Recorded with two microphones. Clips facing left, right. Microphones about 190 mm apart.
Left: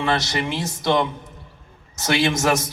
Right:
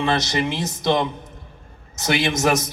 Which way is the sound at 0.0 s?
20° right (ahead or behind).